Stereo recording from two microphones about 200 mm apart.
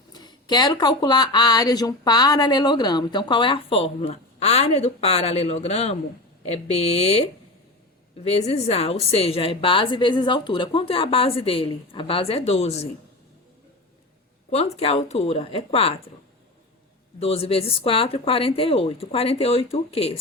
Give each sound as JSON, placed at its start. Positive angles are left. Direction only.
{"t": 0.1, "sound": "speech", "side_deg": 20}
{"t": 14.5, "sound": "speech", "side_deg": 30}
{"t": 17.2, "sound": "speech", "side_deg": 30}